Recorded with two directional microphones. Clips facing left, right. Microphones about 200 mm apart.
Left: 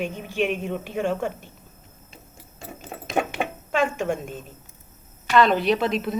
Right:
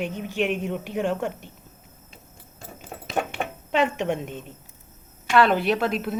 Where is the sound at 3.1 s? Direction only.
10° left (ahead or behind).